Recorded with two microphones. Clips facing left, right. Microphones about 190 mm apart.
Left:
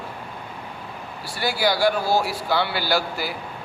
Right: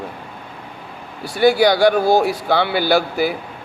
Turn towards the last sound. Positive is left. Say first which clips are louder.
# right 8 dB
turn(degrees=-55)  # may be behind; listen again after turning